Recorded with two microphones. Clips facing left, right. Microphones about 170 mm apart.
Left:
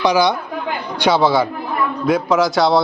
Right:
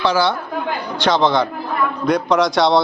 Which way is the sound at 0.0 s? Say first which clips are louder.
Left 2 dB; 15° left (ahead or behind).